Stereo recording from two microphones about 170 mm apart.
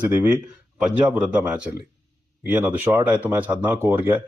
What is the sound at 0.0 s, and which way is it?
A man's voice, 10° right (ahead or behind).